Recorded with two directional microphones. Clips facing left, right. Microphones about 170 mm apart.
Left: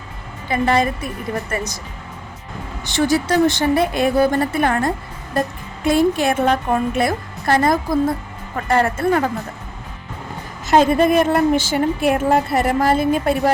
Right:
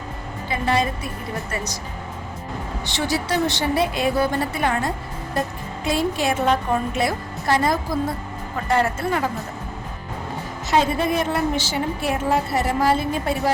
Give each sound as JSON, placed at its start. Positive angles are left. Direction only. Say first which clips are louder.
{"t": 0.6, "sound": "a woman's voice", "louder": "left 4 dB", "side_deg": 50}
{"t": 2.8, "sound": "a woman's voice", "louder": "left 7 dB", "side_deg": 45}
{"t": 10.7, "sound": "a woman's voice", "louder": "left 6 dB", "side_deg": 55}